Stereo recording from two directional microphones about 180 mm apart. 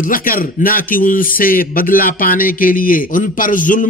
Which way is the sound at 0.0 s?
50° left (ahead or behind).